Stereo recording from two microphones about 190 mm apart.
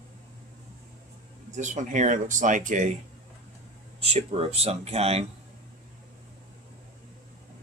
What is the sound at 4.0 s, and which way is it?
Speech, 30° right (ahead or behind).